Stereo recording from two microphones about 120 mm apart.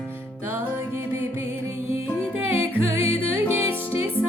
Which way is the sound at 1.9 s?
15° right (ahead or behind).